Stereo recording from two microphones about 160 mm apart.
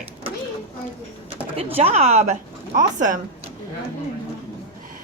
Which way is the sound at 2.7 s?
55° right (ahead or behind).